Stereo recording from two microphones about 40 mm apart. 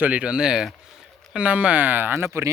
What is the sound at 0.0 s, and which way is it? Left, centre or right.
Speech, right.